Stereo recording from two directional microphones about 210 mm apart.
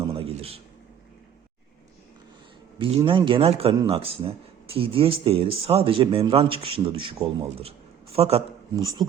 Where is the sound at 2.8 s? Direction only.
25° right (ahead or behind).